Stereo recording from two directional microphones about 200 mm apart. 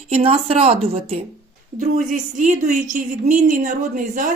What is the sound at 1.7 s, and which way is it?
Speech, 40° right (ahead or behind).